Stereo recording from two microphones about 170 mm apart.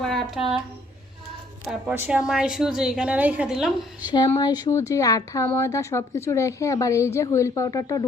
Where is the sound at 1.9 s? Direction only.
5° right (ahead or behind).